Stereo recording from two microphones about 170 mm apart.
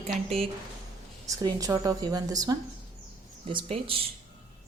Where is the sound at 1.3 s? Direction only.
20° right (ahead or behind).